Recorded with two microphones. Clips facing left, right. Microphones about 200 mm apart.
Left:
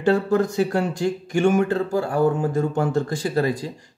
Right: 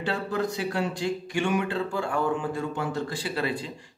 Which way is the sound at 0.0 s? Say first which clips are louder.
Left 9 dB; 45° left (ahead or behind).